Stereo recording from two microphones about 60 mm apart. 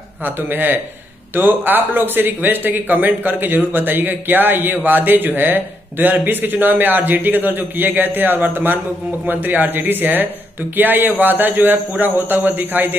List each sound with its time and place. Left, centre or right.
0.2 s speech: right